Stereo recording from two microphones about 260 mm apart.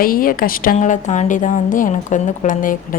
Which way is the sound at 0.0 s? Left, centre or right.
Left.